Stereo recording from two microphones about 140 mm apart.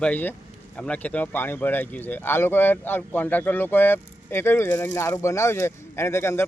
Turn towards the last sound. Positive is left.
turn(degrees=20)  # may be behind; listen again after turning